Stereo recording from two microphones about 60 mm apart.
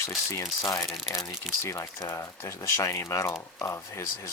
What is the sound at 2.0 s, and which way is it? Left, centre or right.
Speech, left.